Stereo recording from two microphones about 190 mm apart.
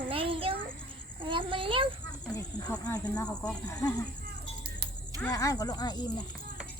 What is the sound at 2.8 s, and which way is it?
Speech, 10° left (ahead or behind).